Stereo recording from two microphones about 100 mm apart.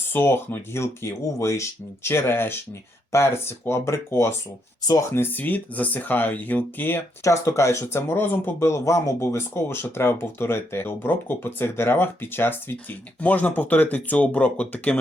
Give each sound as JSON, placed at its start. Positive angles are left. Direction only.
{"t": 0.1, "sound": "speech", "side_deg": 20}
{"t": 7.3, "sound": "speech", "side_deg": 30}